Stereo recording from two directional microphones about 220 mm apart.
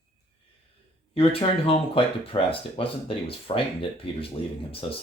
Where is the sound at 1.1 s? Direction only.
25° left (ahead or behind).